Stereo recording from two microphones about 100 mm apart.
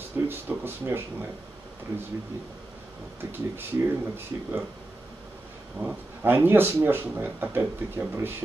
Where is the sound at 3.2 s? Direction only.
20° right (ahead or behind).